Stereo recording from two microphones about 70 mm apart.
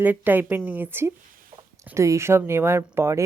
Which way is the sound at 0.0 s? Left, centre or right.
Right.